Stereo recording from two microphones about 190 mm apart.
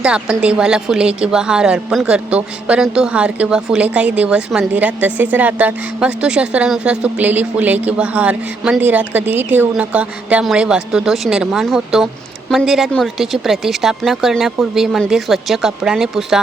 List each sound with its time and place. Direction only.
0.0 s a woman's voice: 5° right (ahead or behind)